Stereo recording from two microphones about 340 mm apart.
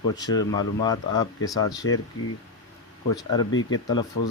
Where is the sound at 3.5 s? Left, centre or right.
Left.